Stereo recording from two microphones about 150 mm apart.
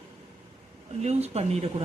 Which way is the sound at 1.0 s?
45° right (ahead or behind).